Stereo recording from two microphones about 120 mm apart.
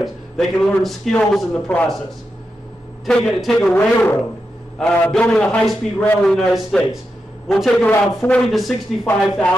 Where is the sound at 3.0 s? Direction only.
5° left (ahead or behind).